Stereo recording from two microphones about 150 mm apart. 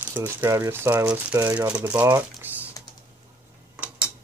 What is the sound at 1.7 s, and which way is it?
Speech, 10° right (ahead or behind).